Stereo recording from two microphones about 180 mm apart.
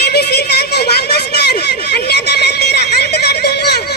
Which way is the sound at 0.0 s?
65° left (ahead or behind).